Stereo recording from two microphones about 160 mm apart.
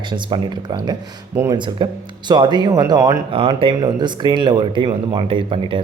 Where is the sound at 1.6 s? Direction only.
30° right (ahead or behind).